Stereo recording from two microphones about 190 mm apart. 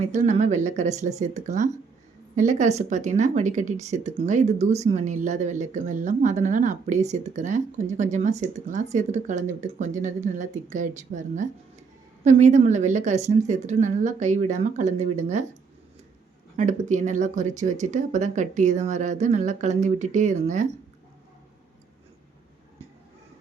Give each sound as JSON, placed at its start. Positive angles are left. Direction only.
{"t": 0.0, "sound": "speech", "side_deg": -35}
{"t": 16.6, "sound": "speech", "side_deg": -40}